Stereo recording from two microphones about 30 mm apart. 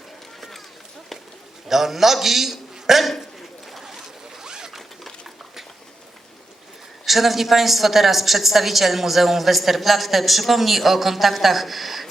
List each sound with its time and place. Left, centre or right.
1.6 s a man's voice: centre
3.8 s boat: centre
4.8 s a sound: centre
7.0 s a woman's voice: centre